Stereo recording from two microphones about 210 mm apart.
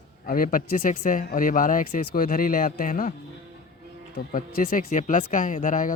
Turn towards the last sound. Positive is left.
turn(degrees=40)  # may be behind; listen again after turning